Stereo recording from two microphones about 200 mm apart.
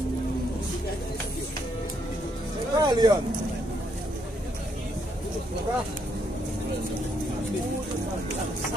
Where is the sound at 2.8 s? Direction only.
20° right (ahead or behind).